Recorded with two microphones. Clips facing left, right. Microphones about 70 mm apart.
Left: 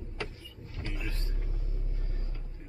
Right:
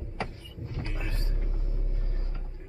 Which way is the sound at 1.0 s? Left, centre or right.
Right.